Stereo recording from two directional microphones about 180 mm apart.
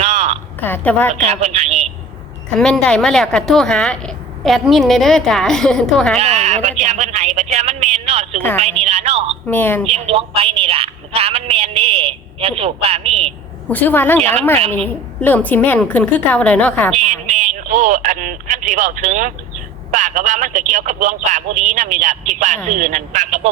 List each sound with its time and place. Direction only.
0.0 s a sound: 35° right (ahead or behind)
0.6 s a woman's voice: 10° left (ahead or behind)
1.1 s speech: 35° right (ahead or behind)
2.6 s speech: 5° left (ahead or behind)
6.1 s speech: 35° right (ahead or behind)
8.4 s a woman's voice: 10° left (ahead or behind)
8.8 s speech: 35° right (ahead or behind)
9.5 s a woman's voice: 10° left (ahead or behind)
9.9 s speech: 30° right (ahead or behind)
13.7 s a woman's voice: 10° left (ahead or behind)
16.9 s speech: 35° right (ahead or behind)